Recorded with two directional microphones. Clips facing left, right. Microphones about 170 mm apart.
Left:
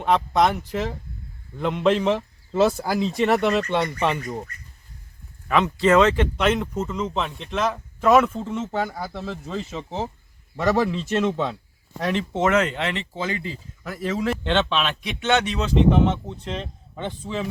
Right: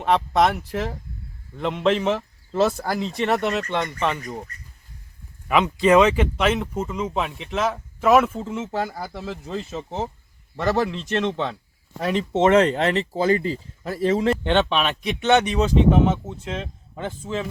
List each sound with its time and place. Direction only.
0.0 s speech: centre (ahead or behind)
5.5 s speech: 15° right (ahead or behind); by 11.5 s 5° left (ahead or behind)
11.9 s speech: 5° right (ahead or behind)
12.3 s speech: 25° right (ahead or behind)
14.4 s a man's voice: 15° right (ahead or behind)